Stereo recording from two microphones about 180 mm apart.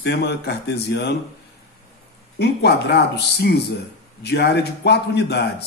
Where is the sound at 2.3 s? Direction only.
65° left (ahead or behind).